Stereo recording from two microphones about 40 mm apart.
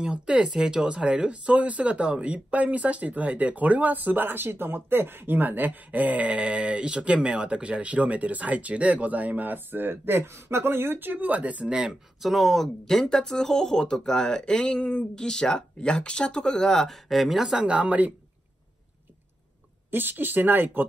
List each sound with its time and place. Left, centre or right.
0.0 s speech: right
11.9 s speech: centre
12.8 s speech: centre
16.9 s speech: centre
17.4 s speech: centre
17.6 s speech: right
19.9 s speech: right